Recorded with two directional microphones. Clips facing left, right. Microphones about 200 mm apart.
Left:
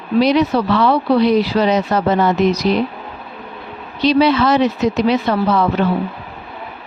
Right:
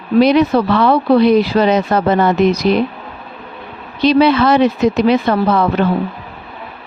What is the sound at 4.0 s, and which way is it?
Speech, 55° right (ahead or behind).